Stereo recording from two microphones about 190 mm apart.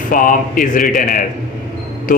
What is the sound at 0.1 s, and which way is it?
Speech, 45° left (ahead or behind).